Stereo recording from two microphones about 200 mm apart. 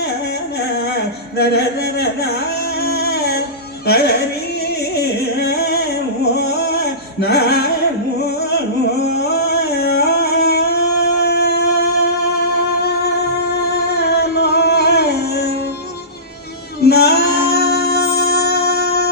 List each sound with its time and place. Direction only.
1.4 s a sound: 55° left (ahead or behind)
3.8 s music: 55° left (ahead or behind)
6.3 s singing: 55° left (ahead or behind)
9.2 s music: 55° left (ahead or behind)
12.8 s music: 50° left (ahead or behind)
16.8 s music: 55° left (ahead or behind)